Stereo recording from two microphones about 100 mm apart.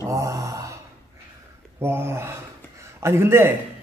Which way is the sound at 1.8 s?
25° right (ahead or behind).